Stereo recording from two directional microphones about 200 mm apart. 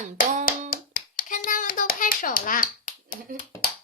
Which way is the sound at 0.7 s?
45° left (ahead or behind).